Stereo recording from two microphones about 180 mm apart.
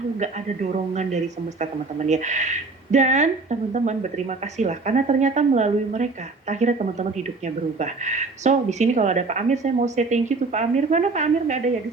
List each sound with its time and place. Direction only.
0.2 s a man's voice: 40° right (ahead or behind)